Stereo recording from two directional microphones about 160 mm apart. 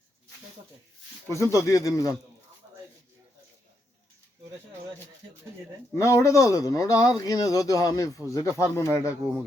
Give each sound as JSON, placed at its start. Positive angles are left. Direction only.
{"t": 1.3, "sound": "speech", "side_deg": 20}
{"t": 5.9, "sound": "speech", "side_deg": 20}